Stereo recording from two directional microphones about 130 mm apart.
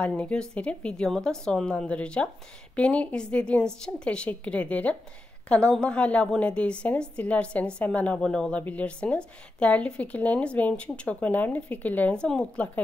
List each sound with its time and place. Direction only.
0.0 s a woman's voice: 10° left (ahead or behind)